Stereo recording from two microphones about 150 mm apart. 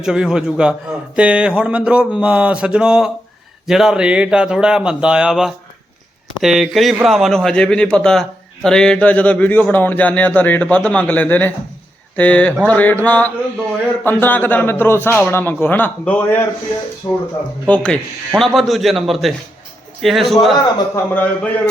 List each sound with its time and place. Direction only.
0.0 s a man's voice: 5° right (ahead or behind)
17.0 s speech: 40° left (ahead or behind)
17.7 s a man's voice: 5° left (ahead or behind)
21.1 s a man's voice: 10° left (ahead or behind)